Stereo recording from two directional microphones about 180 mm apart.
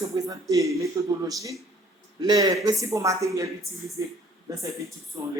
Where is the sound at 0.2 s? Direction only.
20° right (ahead or behind).